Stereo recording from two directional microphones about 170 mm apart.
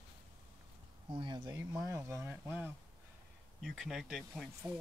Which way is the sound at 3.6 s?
Centre (ahead or behind).